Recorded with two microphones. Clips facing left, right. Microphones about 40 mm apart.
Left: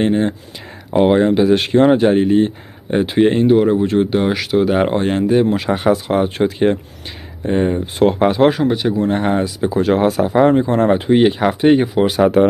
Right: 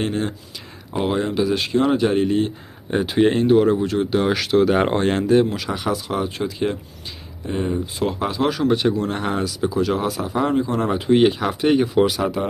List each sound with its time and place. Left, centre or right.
0.0 s speech: left
1.8 s speech: left
3.8 s speech: left
4.2 s speech: centre
5.5 s speech: left
8.6 s speech: centre
8.9 s speech: left
9.8 s speech: left
11.2 s speech: centre
12.1 s speech: left